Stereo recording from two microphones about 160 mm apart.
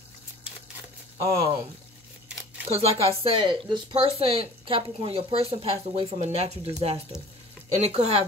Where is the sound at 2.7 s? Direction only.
35° right (ahead or behind).